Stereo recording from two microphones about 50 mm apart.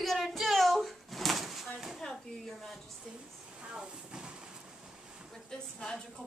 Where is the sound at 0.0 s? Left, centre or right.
Centre.